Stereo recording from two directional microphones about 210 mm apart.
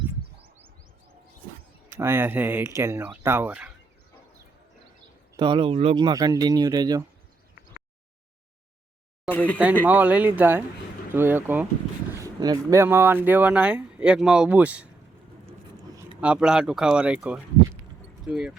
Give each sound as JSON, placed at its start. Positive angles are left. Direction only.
{"t": 1.9, "sound": "speech", "side_deg": -10}
{"t": 5.4, "sound": "speech", "side_deg": -25}
{"t": 9.3, "sound": "speech", "side_deg": 5}
{"t": 9.8, "sound": "speech", "side_deg": -10}
{"t": 16.2, "sound": "speech", "side_deg": -5}